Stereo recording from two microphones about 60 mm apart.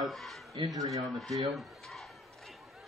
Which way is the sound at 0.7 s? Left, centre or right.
Right.